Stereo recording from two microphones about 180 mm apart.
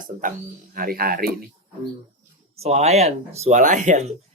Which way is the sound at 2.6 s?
35° right (ahead or behind).